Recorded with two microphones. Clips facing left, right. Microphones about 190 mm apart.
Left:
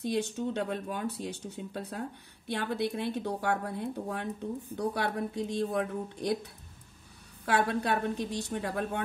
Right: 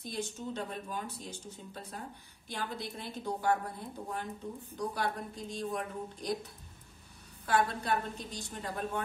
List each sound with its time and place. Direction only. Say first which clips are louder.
0.1 s a woman's voice: left 6 dB; 65° left (ahead or behind)